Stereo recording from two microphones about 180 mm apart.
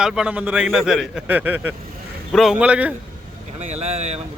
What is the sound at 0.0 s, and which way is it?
A man's voice, 5° right (ahead or behind).